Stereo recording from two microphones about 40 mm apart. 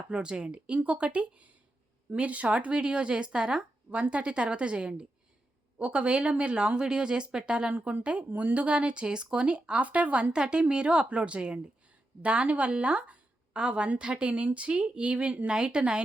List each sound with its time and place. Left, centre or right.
0.1 s a woman's voice: right
0.9 s a woman's voice: right
7.7 s a woman's voice: right
10.3 s a woman's voice: centre